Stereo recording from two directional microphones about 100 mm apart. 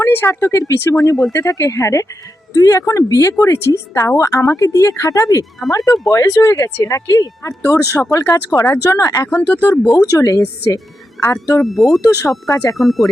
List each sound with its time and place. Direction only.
0.0 s speech: 20° left (ahead or behind)
9.3 s speech: 20° left (ahead or behind)
9.8 s speech: 30° left (ahead or behind)
11.6 s speech: centre (ahead or behind)
12.0 s speech: 30° left (ahead or behind)
12.7 s speech: centre (ahead or behind)